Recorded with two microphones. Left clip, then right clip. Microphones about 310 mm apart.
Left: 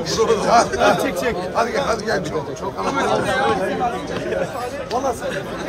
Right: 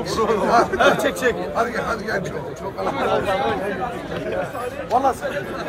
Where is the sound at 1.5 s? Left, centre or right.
Centre.